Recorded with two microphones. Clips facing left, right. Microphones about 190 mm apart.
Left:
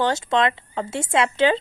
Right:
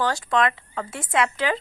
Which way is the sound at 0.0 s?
25° left (ahead or behind).